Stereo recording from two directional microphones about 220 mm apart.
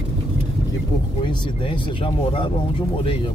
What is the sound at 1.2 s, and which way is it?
Speech, 20° left (ahead or behind).